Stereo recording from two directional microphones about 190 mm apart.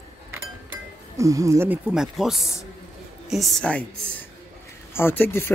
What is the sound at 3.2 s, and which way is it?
A woman's voice, centre (ahead or behind).